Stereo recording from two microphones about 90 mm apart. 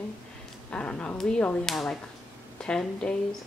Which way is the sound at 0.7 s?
15° left (ahead or behind).